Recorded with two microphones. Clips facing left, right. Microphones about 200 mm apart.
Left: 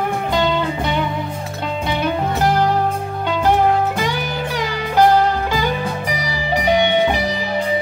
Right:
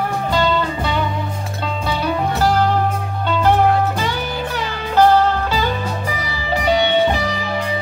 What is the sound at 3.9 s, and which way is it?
Music, 15° left (ahead or behind).